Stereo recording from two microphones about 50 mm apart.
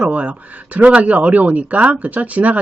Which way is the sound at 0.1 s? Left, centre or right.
Right.